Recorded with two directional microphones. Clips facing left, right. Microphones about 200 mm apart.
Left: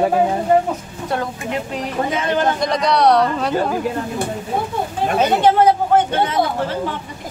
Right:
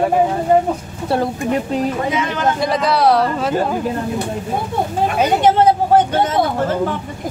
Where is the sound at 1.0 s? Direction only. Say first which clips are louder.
Right 5 dB; 30° right (ahead or behind).